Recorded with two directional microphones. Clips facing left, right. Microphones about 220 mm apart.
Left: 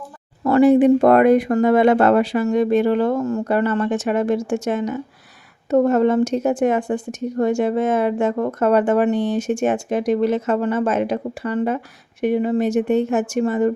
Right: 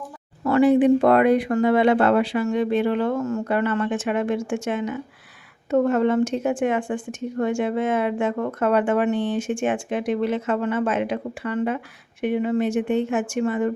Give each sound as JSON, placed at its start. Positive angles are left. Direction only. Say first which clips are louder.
{"t": 0.4, "sound": "a woman's voice", "louder": "left 3 dB", "side_deg": 40}